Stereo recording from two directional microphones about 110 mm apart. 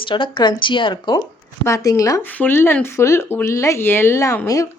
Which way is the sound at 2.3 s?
20° left (ahead or behind).